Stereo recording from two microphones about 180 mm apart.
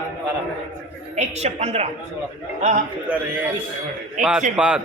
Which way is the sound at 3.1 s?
10° right (ahead or behind).